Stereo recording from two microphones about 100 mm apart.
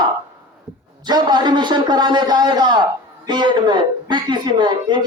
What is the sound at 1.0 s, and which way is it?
A man's voice, 45° right (ahead or behind).